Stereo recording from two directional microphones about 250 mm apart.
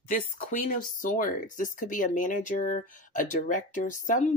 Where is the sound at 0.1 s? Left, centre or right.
Left.